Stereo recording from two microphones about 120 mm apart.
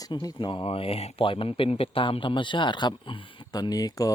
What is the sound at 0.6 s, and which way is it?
Speech, 50° left (ahead or behind).